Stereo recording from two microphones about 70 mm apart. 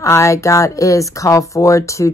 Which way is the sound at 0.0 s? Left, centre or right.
Left.